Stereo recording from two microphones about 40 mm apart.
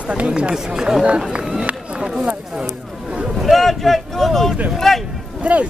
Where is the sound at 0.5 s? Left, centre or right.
Centre.